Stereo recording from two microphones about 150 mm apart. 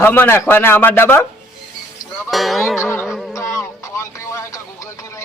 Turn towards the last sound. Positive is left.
turn(degrees=20)  # may be behind; listen again after turning